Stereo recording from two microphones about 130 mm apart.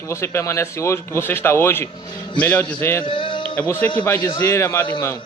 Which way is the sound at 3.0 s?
40° left (ahead or behind).